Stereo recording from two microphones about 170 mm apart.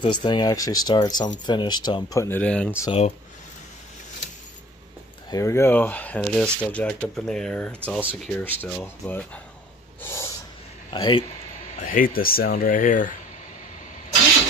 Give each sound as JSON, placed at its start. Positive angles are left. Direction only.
{"t": 0.0, "sound": "speech", "side_deg": 25}
{"t": 5.3, "sound": "speech", "side_deg": 15}
{"t": 10.0, "sound": "snort", "side_deg": 15}
{"t": 10.9, "sound": "speech", "side_deg": 30}
{"t": 11.8, "sound": "speech", "side_deg": 55}